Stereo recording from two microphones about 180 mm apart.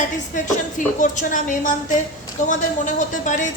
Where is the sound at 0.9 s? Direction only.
45° left (ahead or behind).